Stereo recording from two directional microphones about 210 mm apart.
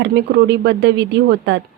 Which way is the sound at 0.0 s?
55° right (ahead or behind).